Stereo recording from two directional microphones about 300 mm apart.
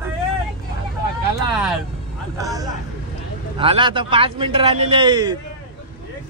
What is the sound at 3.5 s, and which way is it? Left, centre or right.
A man's voice, centre.